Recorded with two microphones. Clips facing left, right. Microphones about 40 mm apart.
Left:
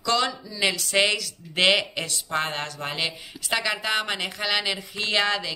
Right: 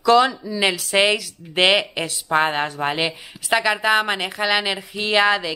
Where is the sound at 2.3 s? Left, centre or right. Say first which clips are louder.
Right 10 dB; right.